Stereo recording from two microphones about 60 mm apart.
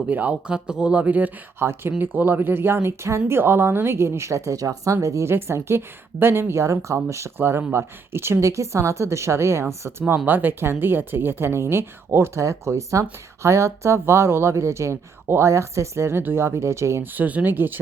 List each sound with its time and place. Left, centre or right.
0.1 s speech: right
1.5 s speech: right
5.3 s speech: right
7.3 s speech: right
8.4 s speech: right
10.2 s speech: right
12.4 s speech: right
17.0 s speech: right